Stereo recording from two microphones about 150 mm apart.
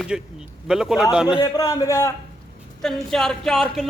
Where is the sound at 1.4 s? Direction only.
25° left (ahead or behind).